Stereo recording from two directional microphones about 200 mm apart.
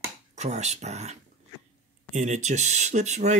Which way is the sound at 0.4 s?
35° right (ahead or behind).